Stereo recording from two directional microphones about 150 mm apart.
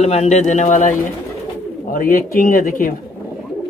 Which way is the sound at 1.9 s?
70° left (ahead or behind).